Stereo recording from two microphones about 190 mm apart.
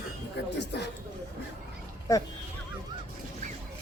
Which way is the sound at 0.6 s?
60° left (ahead or behind).